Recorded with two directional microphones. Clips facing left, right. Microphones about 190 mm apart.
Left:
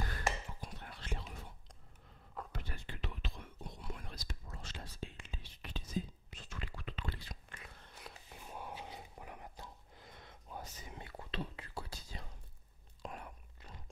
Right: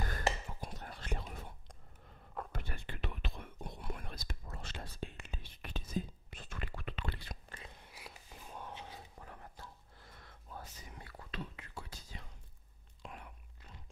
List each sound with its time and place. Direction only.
0.1 s whispering: 45° right (ahead or behind); by 7.3 s 65° right (ahead or behind)
7.4 s a sound: 30° right (ahead or behind)
7.7 s whispering: 10° right (ahead or behind); by 12.3 s 35° left (ahead or behind)
13.0 s chewing: 40° left (ahead or behind)